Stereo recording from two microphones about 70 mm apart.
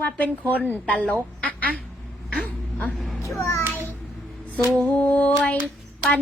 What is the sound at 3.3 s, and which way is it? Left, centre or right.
Speech, left.